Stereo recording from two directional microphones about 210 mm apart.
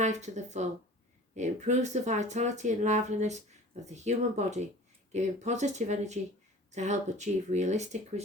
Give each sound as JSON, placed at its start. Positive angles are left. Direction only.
{"t": 0.0, "sound": "speech", "side_deg": -35}